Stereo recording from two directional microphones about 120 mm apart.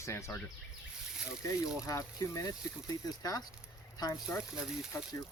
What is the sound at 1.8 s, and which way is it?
Speech, 30° left (ahead or behind).